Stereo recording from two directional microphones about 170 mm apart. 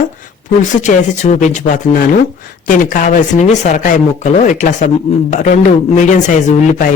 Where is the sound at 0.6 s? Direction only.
45° left (ahead or behind).